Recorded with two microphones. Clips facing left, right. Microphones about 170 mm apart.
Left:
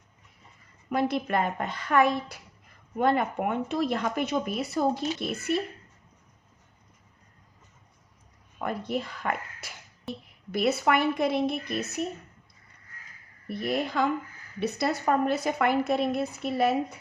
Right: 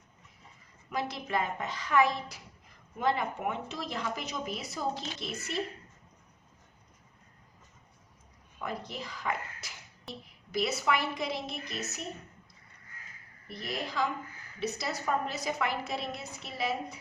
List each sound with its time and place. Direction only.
0.9 s speech: 55° left (ahead or behind)
8.6 s speech: 55° left (ahead or behind)
13.5 s speech: 55° left (ahead or behind)